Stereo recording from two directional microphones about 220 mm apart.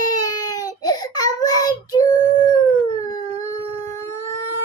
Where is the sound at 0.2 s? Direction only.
15° left (ahead or behind).